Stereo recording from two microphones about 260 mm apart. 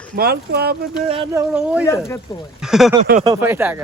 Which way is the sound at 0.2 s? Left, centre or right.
Right.